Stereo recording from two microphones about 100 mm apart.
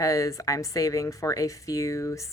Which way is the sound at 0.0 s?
35° left (ahead or behind).